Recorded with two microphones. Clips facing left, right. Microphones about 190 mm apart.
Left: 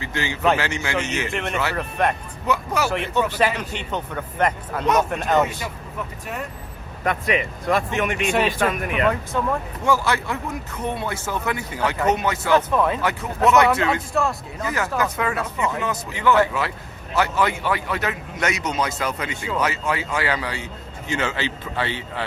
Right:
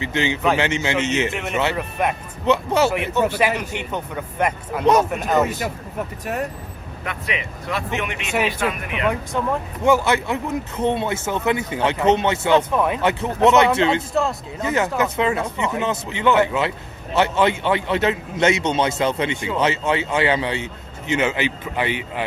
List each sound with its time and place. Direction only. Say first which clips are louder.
0.0 s speech: right 2 dB; 20° right (ahead or behind)
1.3 s a man's voice: right 2 dB; centre (ahead or behind)
2.5 s speech: right 5 dB; 25° right (ahead or behind)
3.6 s a man's voice: right 1 dB; 10° right (ahead or behind)
5.5 s speech: right 5 dB; 45° right (ahead or behind)
7.0 s speech: left 6 dB; 45° left (ahead or behind)
9.0 s a man's voice: right 2 dB; 15° right (ahead or behind)